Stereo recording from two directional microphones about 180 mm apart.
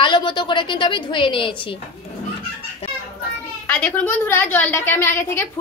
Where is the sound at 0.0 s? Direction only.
25° left (ahead or behind).